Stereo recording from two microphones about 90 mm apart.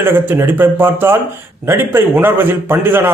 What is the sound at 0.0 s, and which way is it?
A man's voice, 25° right (ahead or behind).